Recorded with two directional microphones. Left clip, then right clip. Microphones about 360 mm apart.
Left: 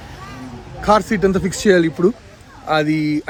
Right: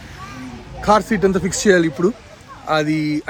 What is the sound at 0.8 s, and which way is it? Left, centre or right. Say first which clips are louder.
Speech: even; centre.